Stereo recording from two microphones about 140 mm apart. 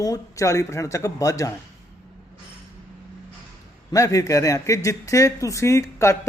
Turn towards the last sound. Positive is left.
turn(degrees=20)  # may be behind; listen again after turning